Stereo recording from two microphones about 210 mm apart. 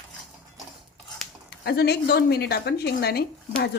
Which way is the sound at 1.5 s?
50° left (ahead or behind).